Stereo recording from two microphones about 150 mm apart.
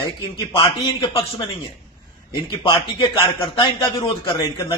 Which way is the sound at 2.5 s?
35° left (ahead or behind).